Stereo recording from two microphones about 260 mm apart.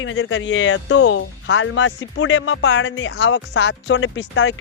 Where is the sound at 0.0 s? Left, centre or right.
Left.